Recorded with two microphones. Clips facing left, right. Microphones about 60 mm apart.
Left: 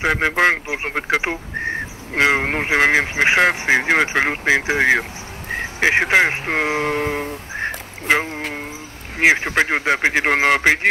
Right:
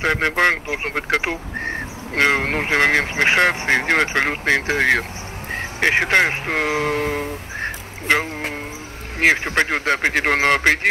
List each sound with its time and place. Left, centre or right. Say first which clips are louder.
0.0 s speech: left 1 dB; centre